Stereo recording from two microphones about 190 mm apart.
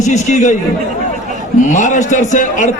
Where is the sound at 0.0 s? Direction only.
40° left (ahead or behind).